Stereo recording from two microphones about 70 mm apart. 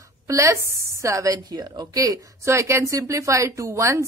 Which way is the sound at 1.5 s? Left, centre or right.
Right.